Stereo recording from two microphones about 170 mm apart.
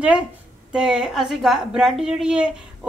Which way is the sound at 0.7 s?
5° right (ahead or behind).